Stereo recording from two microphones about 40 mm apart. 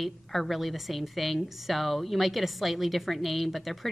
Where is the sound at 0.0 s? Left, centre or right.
Centre.